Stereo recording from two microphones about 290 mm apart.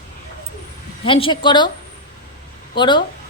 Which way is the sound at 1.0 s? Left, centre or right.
Centre.